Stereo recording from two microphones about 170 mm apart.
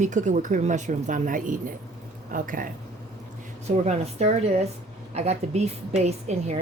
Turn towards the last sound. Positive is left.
turn(degrees=-40)  # may be behind; listen again after turning